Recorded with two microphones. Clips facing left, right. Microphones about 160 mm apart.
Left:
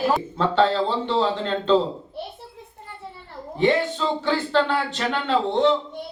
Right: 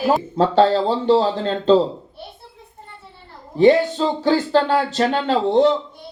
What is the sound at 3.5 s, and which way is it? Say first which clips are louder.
Speech: right 7 dB; 40° right (ahead or behind).